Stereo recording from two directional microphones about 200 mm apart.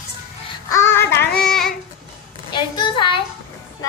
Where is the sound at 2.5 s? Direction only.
25° left (ahead or behind).